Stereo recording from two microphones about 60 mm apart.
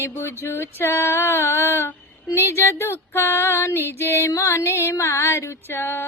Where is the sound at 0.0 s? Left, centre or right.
Left.